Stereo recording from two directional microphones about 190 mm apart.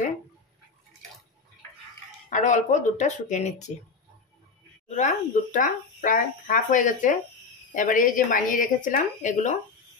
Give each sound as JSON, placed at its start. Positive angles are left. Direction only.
{"t": 2.2, "sound": "speech", "side_deg": 40}
{"t": 4.8, "sound": "speech", "side_deg": 40}